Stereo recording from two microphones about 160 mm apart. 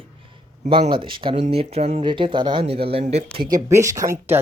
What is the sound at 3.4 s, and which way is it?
Speech, 25° right (ahead or behind).